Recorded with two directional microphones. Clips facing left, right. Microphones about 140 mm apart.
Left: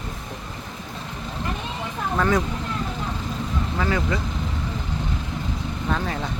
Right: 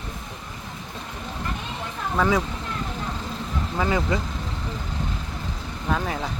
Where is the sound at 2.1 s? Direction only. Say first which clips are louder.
Even; 5° right (ahead or behind).